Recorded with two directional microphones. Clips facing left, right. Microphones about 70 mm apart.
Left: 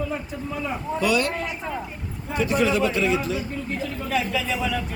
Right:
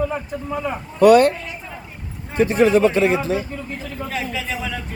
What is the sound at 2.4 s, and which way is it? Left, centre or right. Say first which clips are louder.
Speech: right 7 dB; right.